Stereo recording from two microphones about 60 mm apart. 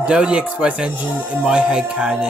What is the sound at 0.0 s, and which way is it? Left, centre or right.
Speech, centre.